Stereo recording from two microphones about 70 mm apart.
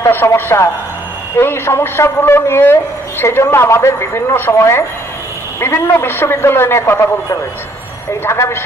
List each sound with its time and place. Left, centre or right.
0.3 s a woman's voice: left
8.1 s a man's voice: left